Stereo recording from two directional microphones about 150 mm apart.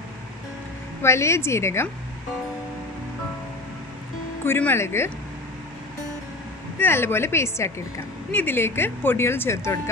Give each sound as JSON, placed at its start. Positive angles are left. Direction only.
{"t": 1.0, "sound": "speech", "side_deg": 20}
{"t": 4.5, "sound": "speech", "side_deg": 15}
{"t": 6.8, "sound": "speech", "side_deg": 15}